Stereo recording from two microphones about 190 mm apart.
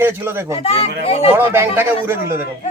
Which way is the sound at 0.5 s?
30° left (ahead or behind).